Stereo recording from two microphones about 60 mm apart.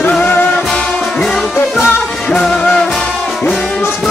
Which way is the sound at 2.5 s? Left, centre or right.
Centre.